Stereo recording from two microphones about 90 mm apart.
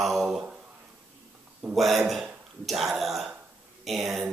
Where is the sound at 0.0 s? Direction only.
Centre (ahead or behind).